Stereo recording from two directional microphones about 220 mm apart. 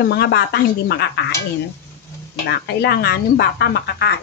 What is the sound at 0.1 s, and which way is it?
Speech, 50° left (ahead or behind).